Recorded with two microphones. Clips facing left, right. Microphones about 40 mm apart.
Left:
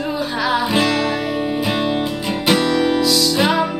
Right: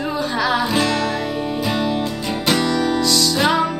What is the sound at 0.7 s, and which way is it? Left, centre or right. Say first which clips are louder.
Music: left 2 dB; centre.